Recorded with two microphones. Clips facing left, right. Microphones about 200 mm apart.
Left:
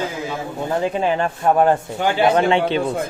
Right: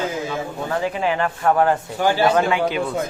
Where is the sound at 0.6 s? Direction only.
20° left (ahead or behind).